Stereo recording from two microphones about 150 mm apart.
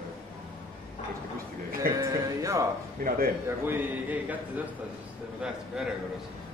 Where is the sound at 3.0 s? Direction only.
75° right (ahead or behind).